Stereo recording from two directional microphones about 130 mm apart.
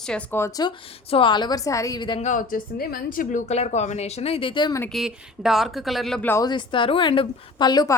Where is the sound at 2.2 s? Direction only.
80° left.